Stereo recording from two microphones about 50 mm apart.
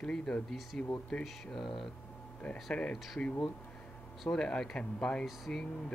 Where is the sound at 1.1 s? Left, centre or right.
Left.